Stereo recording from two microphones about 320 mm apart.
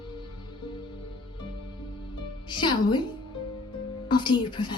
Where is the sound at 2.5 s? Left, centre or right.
Centre.